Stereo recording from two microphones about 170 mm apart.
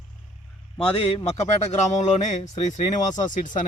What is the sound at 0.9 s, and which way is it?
A man's voice, 35° left (ahead or behind).